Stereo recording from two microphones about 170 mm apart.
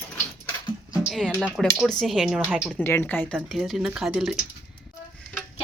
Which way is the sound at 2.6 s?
10° left (ahead or behind).